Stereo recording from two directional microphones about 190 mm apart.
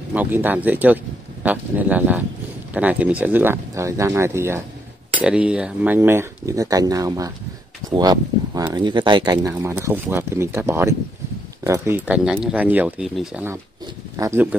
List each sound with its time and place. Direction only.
0.1 s speech: 10° right (ahead or behind)